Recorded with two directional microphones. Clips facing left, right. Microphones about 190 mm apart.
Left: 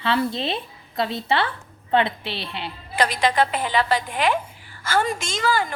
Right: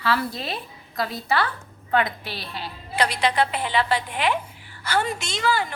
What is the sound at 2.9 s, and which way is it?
A woman's voice, 45° left (ahead or behind).